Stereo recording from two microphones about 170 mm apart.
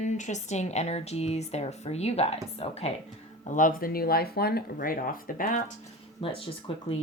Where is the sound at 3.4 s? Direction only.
50° left (ahead or behind).